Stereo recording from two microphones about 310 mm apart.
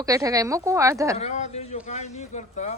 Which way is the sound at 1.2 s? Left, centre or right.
Left.